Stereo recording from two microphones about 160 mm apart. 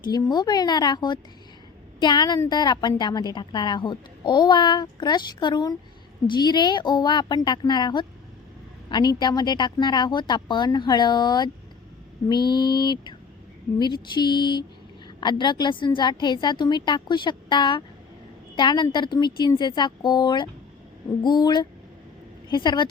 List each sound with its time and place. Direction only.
0.0 s a woman's voice: 25° left (ahead or behind)